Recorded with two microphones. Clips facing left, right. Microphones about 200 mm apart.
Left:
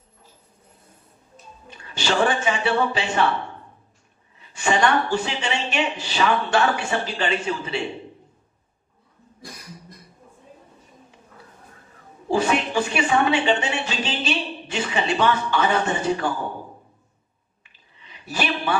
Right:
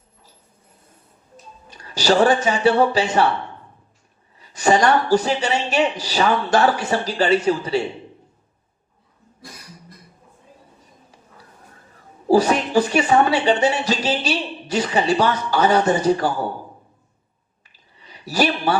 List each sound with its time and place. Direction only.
1.7 s speech: 40° right (ahead or behind)
4.4 s speech: 40° right (ahead or behind)
12.3 s speech: 40° right (ahead or behind)
17.7 s a sound: 40° right (ahead or behind)